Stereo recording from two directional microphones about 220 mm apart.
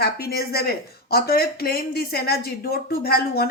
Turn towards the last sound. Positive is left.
turn(degrees=45)  # may be behind; listen again after turning